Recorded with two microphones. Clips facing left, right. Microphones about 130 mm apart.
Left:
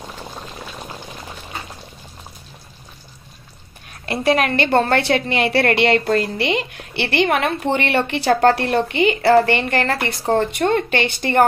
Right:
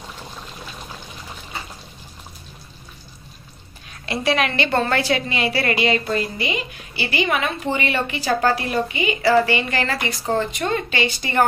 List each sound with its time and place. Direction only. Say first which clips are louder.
4.0 s a woman's voice: left 3 dB; 50° left (ahead or behind)
4.7 s a woman's voice: left 4 dB; 55° left (ahead or behind)